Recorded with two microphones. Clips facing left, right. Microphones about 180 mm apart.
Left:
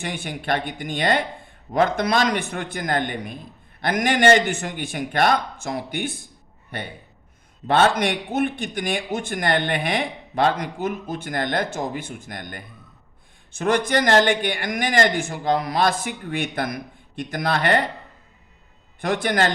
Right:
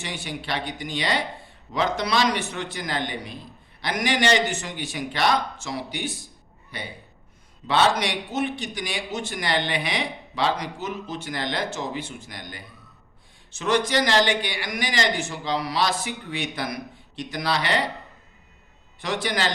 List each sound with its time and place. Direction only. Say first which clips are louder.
0.0 s a man's voice: left 3 dB; 55° left (ahead or behind)
19.0 s speech: left 5 dB; 55° left (ahead or behind)